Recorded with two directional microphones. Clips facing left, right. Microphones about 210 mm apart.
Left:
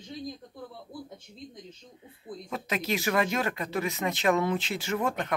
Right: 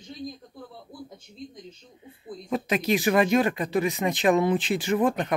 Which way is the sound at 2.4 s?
20° right (ahead or behind).